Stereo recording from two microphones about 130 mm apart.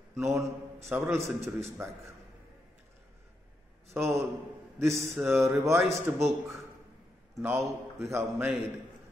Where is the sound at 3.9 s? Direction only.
20° right (ahead or behind).